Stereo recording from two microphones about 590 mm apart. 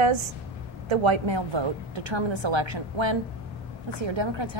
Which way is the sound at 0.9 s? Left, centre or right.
Right.